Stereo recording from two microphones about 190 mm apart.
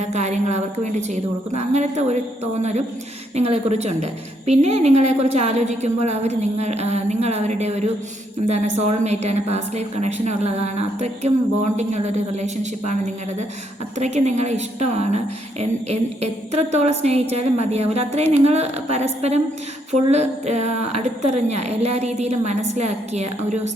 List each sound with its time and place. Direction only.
0.0 s a woman's voice: 35° right (ahead or behind)
14.0 s a woman's voice: 35° right (ahead or behind)